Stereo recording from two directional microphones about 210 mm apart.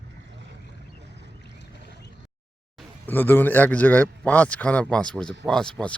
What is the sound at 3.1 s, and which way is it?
A man's voice, 10° left (ahead or behind).